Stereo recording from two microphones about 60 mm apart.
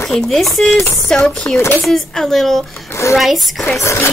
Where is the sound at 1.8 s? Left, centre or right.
Centre.